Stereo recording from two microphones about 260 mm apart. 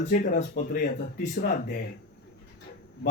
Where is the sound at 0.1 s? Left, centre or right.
Left.